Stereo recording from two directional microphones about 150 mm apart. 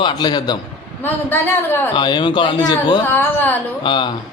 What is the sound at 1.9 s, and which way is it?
A man's voice, 30° left (ahead or behind).